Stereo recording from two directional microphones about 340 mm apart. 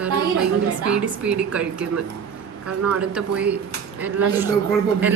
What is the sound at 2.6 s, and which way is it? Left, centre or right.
Speech, right.